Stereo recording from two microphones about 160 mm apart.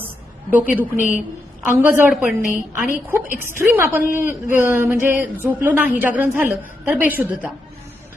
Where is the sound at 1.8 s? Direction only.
10° right (ahead or behind).